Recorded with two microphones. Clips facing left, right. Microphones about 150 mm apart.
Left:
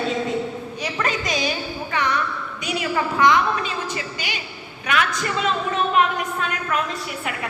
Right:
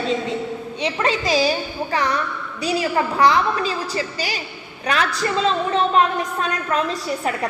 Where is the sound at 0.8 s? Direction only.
30° right (ahead or behind).